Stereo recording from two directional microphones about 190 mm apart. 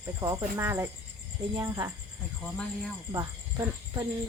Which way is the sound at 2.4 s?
5° left (ahead or behind).